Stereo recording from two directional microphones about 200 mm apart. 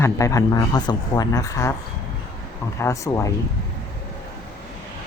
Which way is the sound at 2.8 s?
15° left (ahead or behind).